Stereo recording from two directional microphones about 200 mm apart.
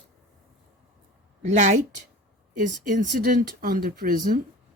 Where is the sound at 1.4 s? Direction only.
35° right (ahead or behind).